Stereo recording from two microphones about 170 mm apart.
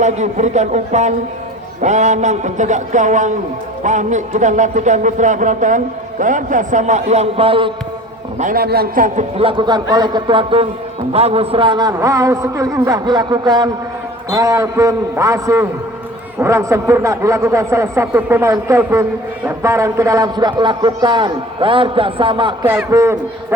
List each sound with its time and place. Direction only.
0.0 s speech: 45° right (ahead or behind)
8.4 s a woman's voice: 55° right (ahead or behind)
9.4 s a man's voice: 30° right (ahead or behind)
22.6 s speech: 10° right (ahead or behind)